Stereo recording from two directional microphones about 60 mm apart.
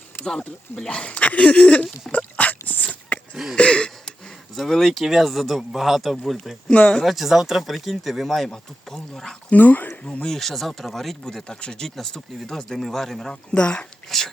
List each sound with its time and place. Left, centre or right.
0.3 s speech: centre
0.9 s speech: centre
2.1 s dog: left
3.5 s a sound: centre
4.5 s speech: centre
6.7 s speech: centre
7.0 s speech: centre
8.4 s speech: centre
9.5 s speech: left
10.0 s speech: centre
13.5 s speech: centre
14.1 s speech: centre